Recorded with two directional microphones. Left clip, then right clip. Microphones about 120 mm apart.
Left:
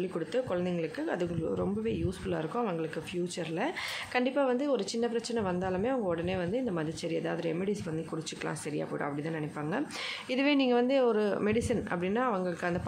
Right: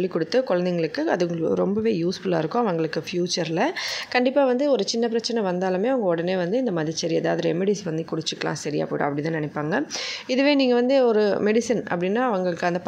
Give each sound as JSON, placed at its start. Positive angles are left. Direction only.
{"t": 0.0, "sound": "speech", "side_deg": -60}
{"t": 10.3, "sound": "speech", "side_deg": -40}